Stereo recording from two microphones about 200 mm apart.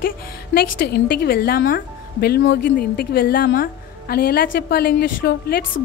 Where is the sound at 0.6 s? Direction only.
50° left (ahead or behind).